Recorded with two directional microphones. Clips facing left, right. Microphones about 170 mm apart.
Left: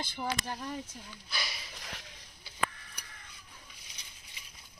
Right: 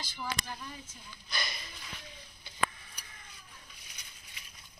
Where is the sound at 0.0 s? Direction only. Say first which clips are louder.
Left 4 dB; 55° left (ahead or behind).